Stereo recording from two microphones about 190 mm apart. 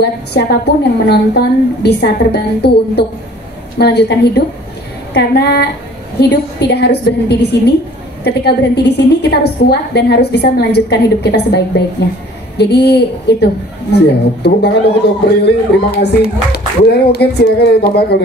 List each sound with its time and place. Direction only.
0.0 s a woman's voice: 60° left (ahead or behind)